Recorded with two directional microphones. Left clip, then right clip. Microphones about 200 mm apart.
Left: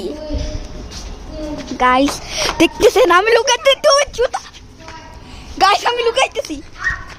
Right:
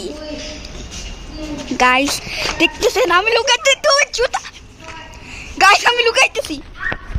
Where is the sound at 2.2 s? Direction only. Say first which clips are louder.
Left 2 dB; 25° left (ahead or behind).